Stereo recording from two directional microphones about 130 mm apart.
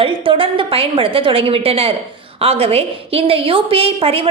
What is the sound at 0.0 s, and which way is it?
A woman's voice, 45° right (ahead or behind).